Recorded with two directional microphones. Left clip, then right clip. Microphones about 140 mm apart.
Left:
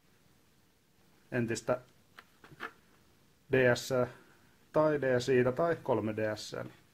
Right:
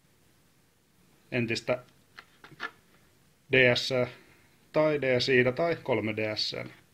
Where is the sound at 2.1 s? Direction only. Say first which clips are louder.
Right 5 dB; 15° left (ahead or behind).